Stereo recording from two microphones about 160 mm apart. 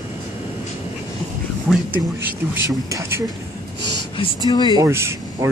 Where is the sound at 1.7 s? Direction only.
10° right (ahead or behind).